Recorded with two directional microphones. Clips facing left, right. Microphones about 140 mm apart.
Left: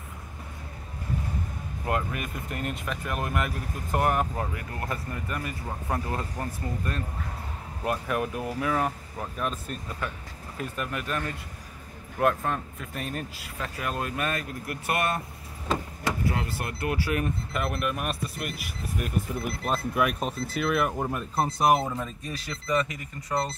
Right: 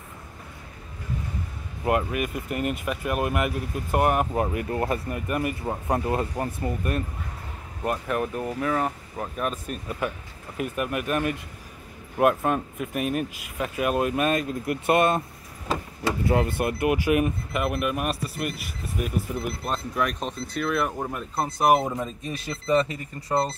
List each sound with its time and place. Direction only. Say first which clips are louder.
1.9 s speech: right 6 dB; 15° right (ahead or behind)
7.8 s speech: right 2 dB; centre (ahead or behind); by 15.2 s 25° right (ahead or behind)
16.3 s speech: right 7 dB; 25° right (ahead or behind)